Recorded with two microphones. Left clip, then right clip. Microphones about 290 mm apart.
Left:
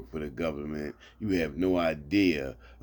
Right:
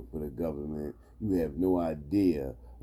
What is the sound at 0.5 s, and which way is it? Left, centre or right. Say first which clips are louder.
Speech: left 1 dB; left.